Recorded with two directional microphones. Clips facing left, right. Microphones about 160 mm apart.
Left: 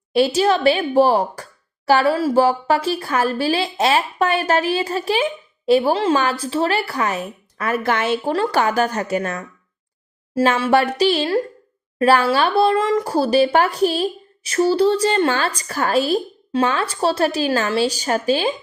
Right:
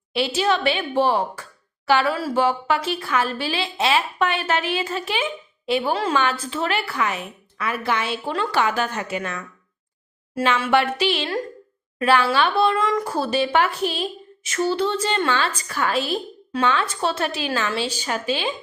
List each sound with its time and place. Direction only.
0.1 s a woman's voice: 40° left (ahead or behind)
8.3 s a woman's voice: 40° left (ahead or behind)
10.6 s a woman's voice: 40° left (ahead or behind)